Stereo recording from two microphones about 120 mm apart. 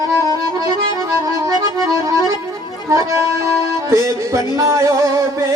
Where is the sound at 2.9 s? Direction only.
25° right (ahead or behind).